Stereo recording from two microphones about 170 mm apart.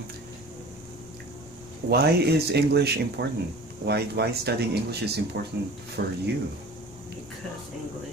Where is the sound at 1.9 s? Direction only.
70° right (ahead or behind).